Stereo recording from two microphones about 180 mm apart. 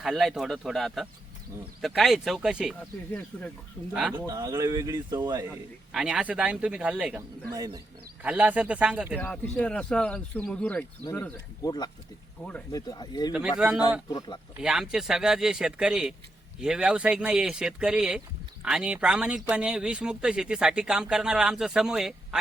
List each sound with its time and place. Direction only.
0.0 s speech: centre (ahead or behind)
3.1 s speech: 10° left (ahead or behind)
3.9 s speech: 5° right (ahead or behind)
4.3 s speech: 20° right (ahead or behind)
5.5 s speech: 5° right (ahead or behind)
7.2 s speech: 20° right (ahead or behind)
8.2 s speech: 5° right (ahead or behind)
9.1 s speech: 5° left (ahead or behind)
11.6 s speech: 20° left (ahead or behind)
12.4 s speech: 5° left (ahead or behind)
12.7 s speech: 20° left (ahead or behind)
13.6 s speech: 5° right (ahead or behind)
14.1 s speech: 20° left (ahead or behind)
14.6 s speech: 5° right (ahead or behind)